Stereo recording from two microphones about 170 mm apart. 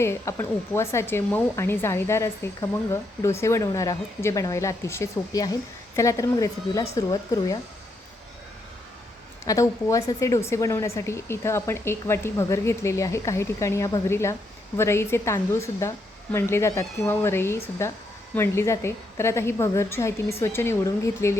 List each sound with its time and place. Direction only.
0.0 s speech: 15° left (ahead or behind)
9.5 s speech: 20° left (ahead or behind)